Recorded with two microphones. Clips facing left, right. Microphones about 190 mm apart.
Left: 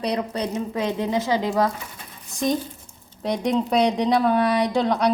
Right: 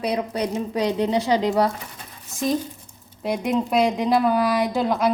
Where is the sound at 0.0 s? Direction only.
10° right (ahead or behind).